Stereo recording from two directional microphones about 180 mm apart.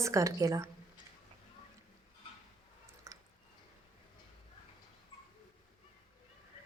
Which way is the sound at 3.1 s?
15° right (ahead or behind).